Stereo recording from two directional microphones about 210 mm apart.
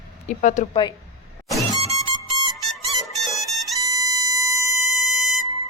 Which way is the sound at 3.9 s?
15° right (ahead or behind).